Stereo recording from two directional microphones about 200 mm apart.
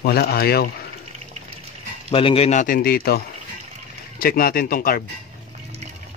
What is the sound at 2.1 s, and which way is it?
A man's voice, 30° left (ahead or behind).